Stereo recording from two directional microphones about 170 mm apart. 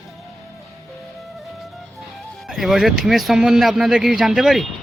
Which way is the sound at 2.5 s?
Centre (ahead or behind).